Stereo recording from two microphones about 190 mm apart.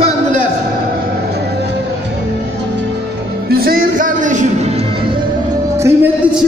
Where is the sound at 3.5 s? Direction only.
50° right (ahead or behind).